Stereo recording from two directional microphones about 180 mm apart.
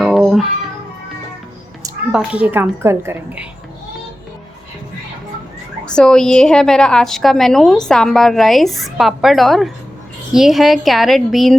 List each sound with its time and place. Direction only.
0.0 s music: centre (ahead or behind)
2.1 s a woman's voice: 10° right (ahead or behind)
5.8 s a woman's voice: 5° left (ahead or behind)